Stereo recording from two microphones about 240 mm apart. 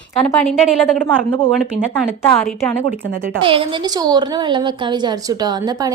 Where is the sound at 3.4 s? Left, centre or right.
Right.